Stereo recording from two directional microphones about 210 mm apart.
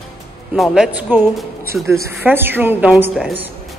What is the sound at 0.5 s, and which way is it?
Speech, centre (ahead or behind).